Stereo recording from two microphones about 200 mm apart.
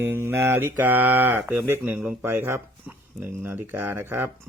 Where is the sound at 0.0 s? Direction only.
10° right (ahead or behind).